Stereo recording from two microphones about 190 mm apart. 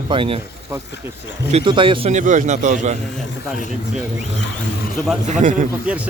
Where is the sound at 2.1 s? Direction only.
40° right (ahead or behind).